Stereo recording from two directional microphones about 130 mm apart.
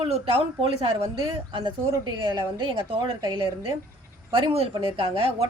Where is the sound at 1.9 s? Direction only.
30° right (ahead or behind).